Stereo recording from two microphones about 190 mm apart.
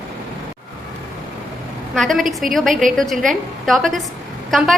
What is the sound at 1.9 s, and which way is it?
Speech, centre (ahead or behind).